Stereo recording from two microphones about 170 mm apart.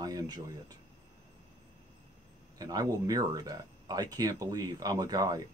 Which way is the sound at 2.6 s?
20° right (ahead or behind).